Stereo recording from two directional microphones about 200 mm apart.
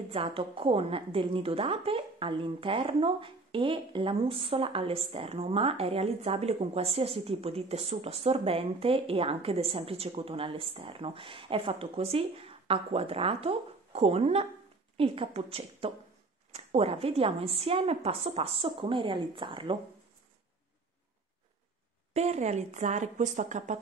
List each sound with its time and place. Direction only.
0.1 s a woman's voice: 30° right (ahead or behind)
22.1 s speech: 35° right (ahead or behind)